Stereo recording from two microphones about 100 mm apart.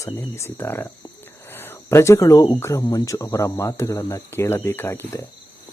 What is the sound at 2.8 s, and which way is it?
Speech, 40° left (ahead or behind).